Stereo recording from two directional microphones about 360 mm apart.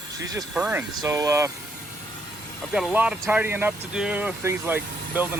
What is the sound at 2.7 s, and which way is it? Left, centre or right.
Speech, centre.